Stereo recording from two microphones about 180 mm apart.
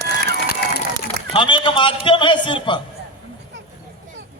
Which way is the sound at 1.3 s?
25° left (ahead or behind).